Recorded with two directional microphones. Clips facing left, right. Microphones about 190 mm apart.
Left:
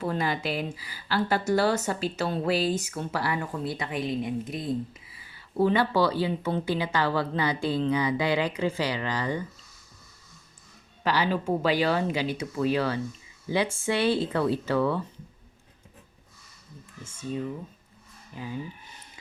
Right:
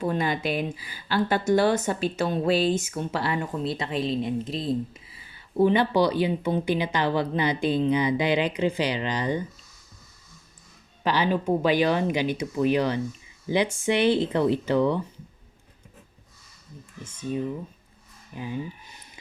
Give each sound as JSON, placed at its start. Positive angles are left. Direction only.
{"t": 0.0, "sound": "speech", "side_deg": -20}
{"t": 11.0, "sound": "speech", "side_deg": -20}
{"t": 18.3, "sound": "speech", "side_deg": -20}